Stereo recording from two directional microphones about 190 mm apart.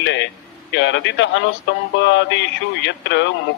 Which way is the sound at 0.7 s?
75° left (ahead or behind).